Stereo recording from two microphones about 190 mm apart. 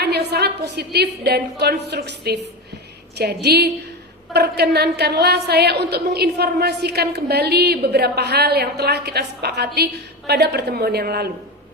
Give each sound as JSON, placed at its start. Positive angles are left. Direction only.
{"t": 0.0, "sound": "a woman's voice", "side_deg": -60}